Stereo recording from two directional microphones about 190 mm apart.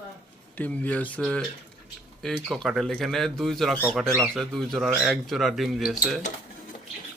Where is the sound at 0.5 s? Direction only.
10° left (ahead or behind).